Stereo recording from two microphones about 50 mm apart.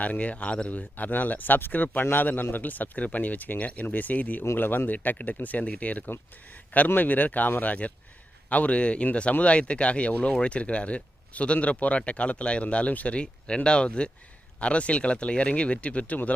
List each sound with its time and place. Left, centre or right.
0.0 s speech: left
0.7 s speech: left